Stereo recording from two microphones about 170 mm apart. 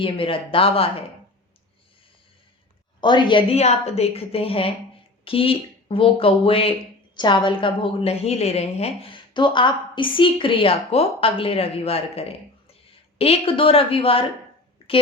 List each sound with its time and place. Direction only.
0.0 s a woman's voice: 30° left (ahead or behind)
3.0 s a woman's voice: 25° left (ahead or behind)